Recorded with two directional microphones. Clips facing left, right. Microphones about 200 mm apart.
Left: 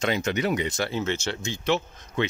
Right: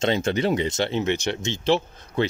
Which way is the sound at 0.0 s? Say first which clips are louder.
Right 3 dB; 30° right (ahead or behind).